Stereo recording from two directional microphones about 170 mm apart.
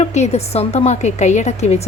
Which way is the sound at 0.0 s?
40° left (ahead or behind).